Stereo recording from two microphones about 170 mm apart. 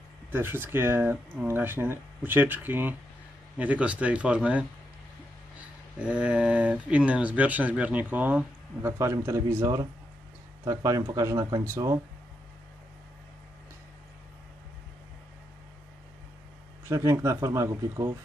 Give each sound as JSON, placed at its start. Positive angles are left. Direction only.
{"t": 0.3, "sound": "speech", "side_deg": -10}
{"t": 16.8, "sound": "speech", "side_deg": -15}